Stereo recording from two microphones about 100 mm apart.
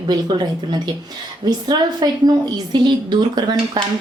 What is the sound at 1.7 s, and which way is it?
Speech, 40° right (ahead or behind).